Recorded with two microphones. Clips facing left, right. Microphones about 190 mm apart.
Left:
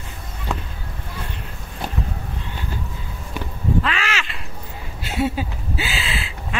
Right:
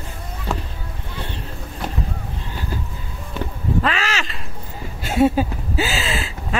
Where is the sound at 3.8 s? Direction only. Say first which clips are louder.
Right 3 dB; 40° right (ahead or behind).